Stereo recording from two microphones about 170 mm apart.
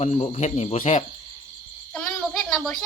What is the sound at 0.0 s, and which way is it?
Speech, 40° left (ahead or behind).